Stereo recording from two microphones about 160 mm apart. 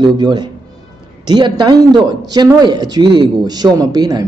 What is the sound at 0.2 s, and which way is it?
A man's voice, 25° right (ahead or behind).